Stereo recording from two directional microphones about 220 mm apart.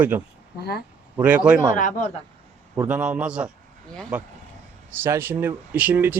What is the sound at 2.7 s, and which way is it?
Speech, 5° right (ahead or behind).